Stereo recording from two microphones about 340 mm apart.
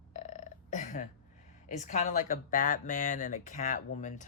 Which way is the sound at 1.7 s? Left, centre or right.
Left.